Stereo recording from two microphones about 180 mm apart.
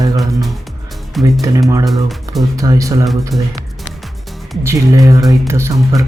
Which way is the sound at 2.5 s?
20° right (ahead or behind).